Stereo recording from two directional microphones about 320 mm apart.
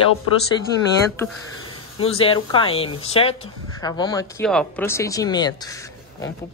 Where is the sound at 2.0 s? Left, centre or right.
Centre.